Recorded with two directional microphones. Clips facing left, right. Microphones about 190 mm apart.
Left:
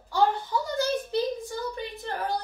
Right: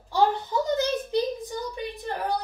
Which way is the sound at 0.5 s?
20° right (ahead or behind).